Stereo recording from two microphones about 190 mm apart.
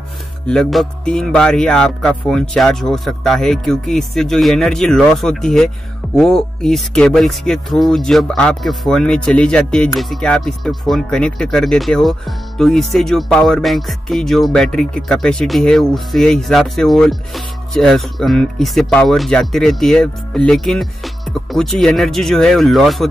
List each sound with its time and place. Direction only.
0.5 s speech: centre (ahead or behind)